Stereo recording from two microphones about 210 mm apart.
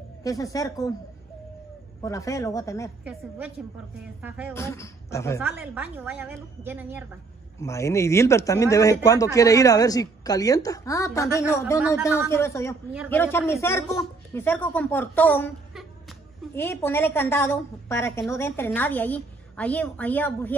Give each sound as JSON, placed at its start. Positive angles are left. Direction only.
{"t": 0.2, "sound": "speech", "side_deg": 15}
{"t": 2.0, "sound": "speech", "side_deg": 15}
{"t": 3.1, "sound": "a woman's voice", "side_deg": -5}
{"t": 4.6, "sound": "speech", "side_deg": 15}
{"t": 5.4, "sound": "a woman's voice", "side_deg": -10}
{"t": 7.5, "sound": "speech", "side_deg": 15}